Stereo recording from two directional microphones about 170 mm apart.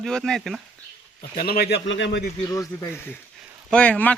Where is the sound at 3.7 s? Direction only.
10° left (ahead or behind).